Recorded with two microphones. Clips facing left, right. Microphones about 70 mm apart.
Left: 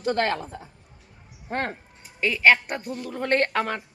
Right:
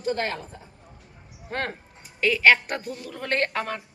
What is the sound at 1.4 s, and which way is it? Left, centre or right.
Speech, left.